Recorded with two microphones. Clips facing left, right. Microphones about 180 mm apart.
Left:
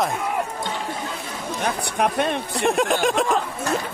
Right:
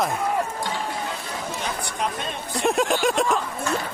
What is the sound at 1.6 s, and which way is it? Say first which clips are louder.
A man's voice: left 8 dB; 65° left (ahead or behind).